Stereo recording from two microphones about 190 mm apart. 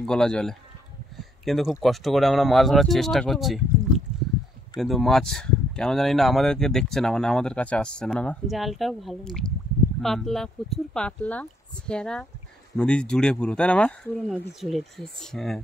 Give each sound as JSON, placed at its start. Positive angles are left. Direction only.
{"t": 0.0, "sound": "speech", "side_deg": 5}